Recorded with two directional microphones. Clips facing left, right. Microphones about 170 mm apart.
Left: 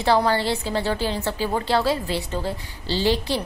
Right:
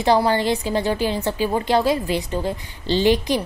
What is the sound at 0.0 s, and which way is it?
A woman's voice, 15° right (ahead or behind).